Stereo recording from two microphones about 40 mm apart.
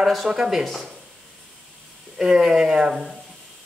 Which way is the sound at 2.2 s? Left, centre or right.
Centre.